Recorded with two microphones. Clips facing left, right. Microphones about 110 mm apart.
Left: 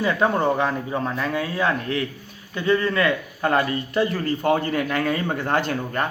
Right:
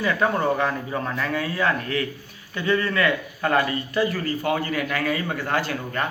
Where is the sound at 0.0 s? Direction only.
15° left (ahead or behind).